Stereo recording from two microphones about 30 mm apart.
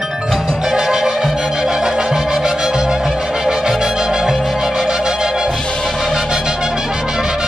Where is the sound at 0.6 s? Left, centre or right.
Centre.